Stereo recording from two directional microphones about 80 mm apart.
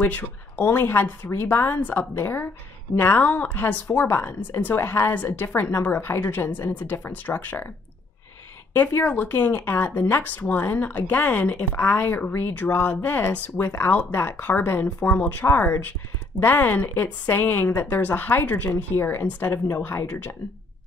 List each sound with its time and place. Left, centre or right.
0.0 s speech: left
8.7 s speech: left